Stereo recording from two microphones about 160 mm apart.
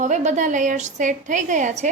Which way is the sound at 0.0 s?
45° right (ahead or behind).